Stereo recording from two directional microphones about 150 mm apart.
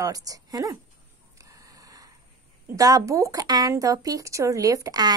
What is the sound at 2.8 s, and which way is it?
A woman's voice, 20° right (ahead or behind).